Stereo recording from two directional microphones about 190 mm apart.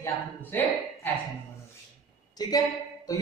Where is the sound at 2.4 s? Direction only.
20° left (ahead or behind).